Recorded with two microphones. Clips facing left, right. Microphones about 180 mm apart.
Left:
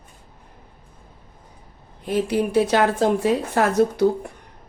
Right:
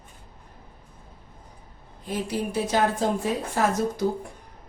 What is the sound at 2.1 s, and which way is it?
A woman's voice, 65° left (ahead or behind).